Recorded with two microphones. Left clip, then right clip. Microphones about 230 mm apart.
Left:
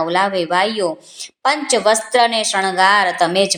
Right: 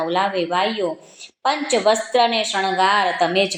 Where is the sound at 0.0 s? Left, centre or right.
Left.